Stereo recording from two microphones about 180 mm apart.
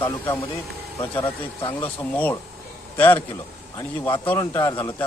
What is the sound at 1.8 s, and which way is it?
Speech, 10° left (ahead or behind).